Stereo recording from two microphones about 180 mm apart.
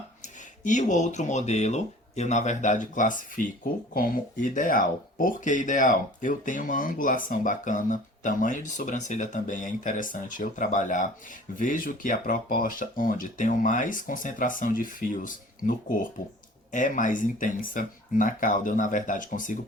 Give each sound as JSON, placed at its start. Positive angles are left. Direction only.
{"t": 0.2, "sound": "speech", "side_deg": 45}